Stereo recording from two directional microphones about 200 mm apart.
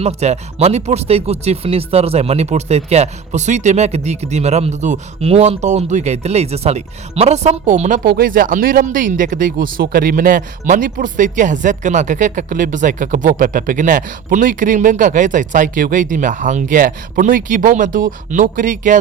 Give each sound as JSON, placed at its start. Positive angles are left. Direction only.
{"t": 0.0, "sound": "speech", "side_deg": -35}